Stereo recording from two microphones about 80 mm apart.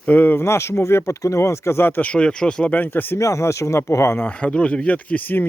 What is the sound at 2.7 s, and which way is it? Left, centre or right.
Speech, left.